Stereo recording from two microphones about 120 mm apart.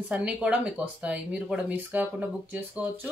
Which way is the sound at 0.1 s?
10° right (ahead or behind).